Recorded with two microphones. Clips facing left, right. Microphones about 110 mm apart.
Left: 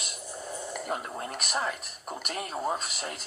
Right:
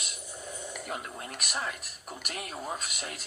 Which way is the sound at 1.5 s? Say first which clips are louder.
Left 4 dB; 30° left (ahead or behind).